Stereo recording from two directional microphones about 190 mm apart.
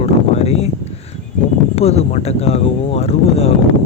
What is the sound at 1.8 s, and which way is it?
Speech, 35° left (ahead or behind).